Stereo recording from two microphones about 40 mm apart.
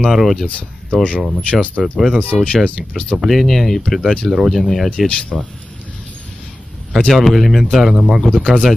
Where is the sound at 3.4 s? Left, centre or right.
Centre.